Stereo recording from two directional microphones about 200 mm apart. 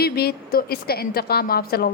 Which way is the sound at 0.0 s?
50° left (ahead or behind).